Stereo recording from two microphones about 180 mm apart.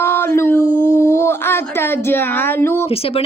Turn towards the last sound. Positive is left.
turn(degrees=35)  # may be behind; listen again after turning